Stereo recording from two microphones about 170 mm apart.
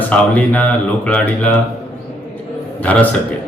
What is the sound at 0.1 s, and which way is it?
A man's voice, 10° left (ahead or behind).